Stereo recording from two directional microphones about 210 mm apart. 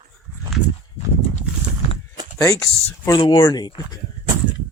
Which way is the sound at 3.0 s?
20° left (ahead or behind).